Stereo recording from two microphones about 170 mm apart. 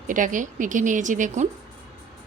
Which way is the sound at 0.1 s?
50° right (ahead or behind).